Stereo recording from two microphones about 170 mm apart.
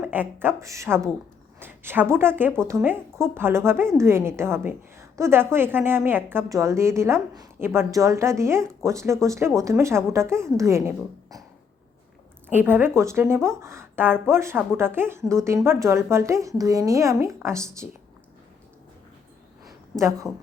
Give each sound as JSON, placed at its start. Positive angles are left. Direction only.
{"t": 0.0, "sound": "speech", "side_deg": -10}
{"t": 12.5, "sound": "speech", "side_deg": -10}
{"t": 20.0, "sound": "speech", "side_deg": -15}